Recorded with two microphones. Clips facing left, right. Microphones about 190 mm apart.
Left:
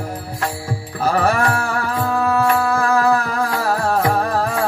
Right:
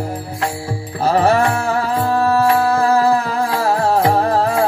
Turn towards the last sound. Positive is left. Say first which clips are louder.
# right 4 dB
turn(degrees=-30)  # may be behind; listen again after turning